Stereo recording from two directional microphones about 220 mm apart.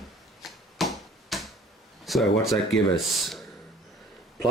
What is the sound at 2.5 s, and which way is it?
Speech, centre (ahead or behind).